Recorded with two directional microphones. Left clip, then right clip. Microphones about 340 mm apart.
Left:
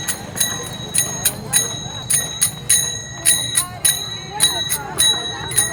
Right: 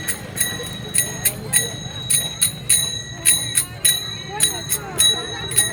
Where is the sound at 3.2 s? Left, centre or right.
Centre.